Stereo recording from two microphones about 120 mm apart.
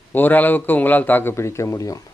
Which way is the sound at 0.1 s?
15° left (ahead or behind).